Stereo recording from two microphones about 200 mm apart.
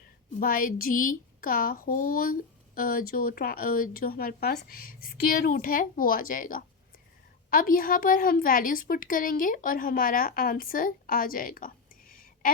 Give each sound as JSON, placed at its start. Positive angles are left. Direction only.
{"t": 0.3, "sound": "speech", "side_deg": 45}